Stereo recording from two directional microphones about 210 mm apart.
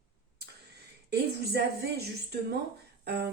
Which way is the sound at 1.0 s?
50° right (ahead or behind).